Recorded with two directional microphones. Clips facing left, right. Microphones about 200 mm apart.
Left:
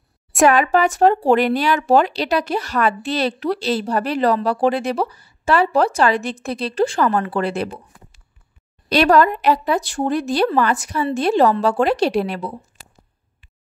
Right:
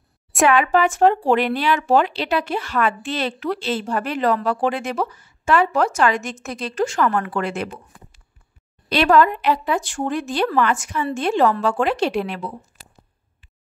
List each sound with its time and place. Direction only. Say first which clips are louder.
0.5 s speech: even; 40° left (ahead or behind)
8.8 s speech: left 2 dB; 40° left (ahead or behind)